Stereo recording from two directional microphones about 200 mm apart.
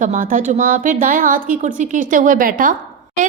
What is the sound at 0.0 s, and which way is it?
A woman's voice, 40° right (ahead or behind).